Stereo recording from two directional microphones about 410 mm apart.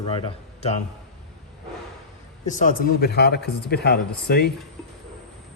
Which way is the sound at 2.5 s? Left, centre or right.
Centre.